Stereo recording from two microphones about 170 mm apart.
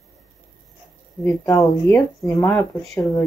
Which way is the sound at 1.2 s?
20° left (ahead or behind).